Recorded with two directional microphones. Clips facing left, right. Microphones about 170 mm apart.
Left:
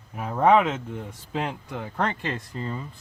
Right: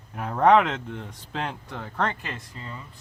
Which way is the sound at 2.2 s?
40° left (ahead or behind).